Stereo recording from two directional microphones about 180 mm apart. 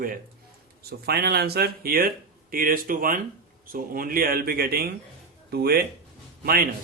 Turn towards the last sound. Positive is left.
turn(degrees=-55)  # may be behind; listen again after turning